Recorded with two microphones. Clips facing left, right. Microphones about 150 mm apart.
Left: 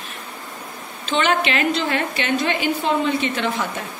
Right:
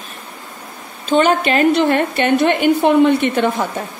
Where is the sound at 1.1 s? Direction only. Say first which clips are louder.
Right 6 dB; 45° right (ahead or behind).